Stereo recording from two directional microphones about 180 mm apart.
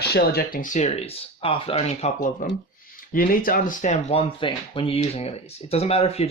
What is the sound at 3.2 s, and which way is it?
Speech, 50° left (ahead or behind).